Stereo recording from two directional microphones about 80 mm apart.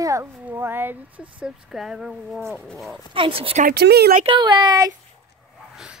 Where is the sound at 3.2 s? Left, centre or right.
Right.